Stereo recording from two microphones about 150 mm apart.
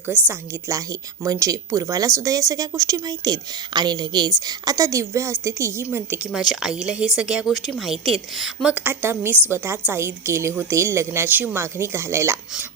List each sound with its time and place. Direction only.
0.1 s a woman's voice: 15° right (ahead or behind)
6.3 s a woman's voice: 5° right (ahead or behind)